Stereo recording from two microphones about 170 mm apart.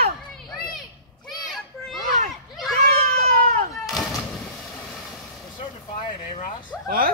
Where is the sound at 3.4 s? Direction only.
55° right (ahead or behind).